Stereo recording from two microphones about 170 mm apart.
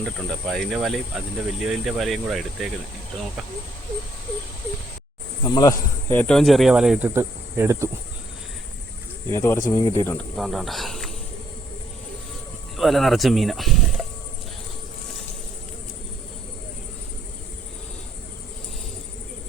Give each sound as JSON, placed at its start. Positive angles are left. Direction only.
{"t": 0.0, "sound": "speech", "side_deg": 0}
{"t": 5.5, "sound": "speech", "side_deg": 20}
{"t": 7.1, "sound": "insect", "side_deg": -15}
{"t": 9.3, "sound": "speech", "side_deg": 15}
{"t": 10.3, "sound": "speech", "side_deg": 0}
{"t": 12.7, "sound": "speech", "side_deg": 0}